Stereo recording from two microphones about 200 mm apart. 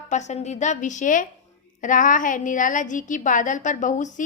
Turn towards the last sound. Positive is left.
turn(degrees=40)  # may be behind; listen again after turning